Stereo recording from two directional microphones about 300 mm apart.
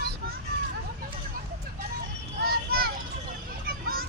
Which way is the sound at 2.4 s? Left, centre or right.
Right.